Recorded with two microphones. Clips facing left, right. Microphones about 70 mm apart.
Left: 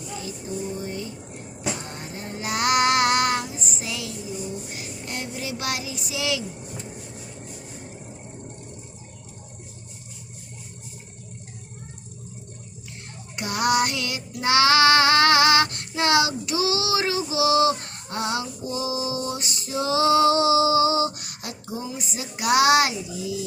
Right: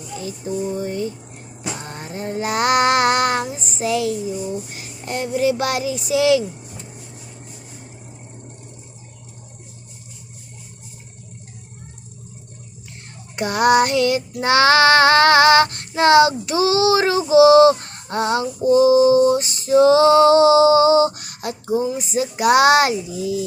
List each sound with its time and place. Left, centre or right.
0.8 s child singing: right
2.1 s child singing: right
13.3 s child singing: right